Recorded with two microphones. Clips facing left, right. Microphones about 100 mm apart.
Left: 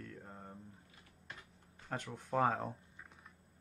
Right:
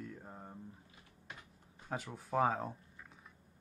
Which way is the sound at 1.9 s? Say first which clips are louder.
Right 1 dB; 5° right (ahead or behind).